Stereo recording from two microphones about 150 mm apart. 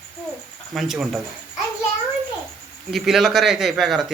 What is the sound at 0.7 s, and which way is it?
Speech, centre (ahead or behind).